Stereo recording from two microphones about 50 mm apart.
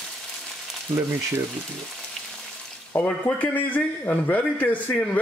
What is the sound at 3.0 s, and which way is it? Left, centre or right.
Speech, left.